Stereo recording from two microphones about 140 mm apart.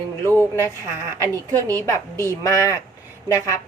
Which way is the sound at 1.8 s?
20° left (ahead or behind).